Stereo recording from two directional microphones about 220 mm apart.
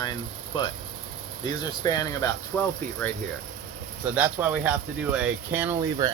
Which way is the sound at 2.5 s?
5° left (ahead or behind).